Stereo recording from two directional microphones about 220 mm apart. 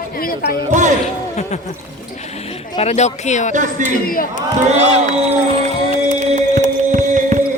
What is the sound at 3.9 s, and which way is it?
Speech, 40° left (ahead or behind).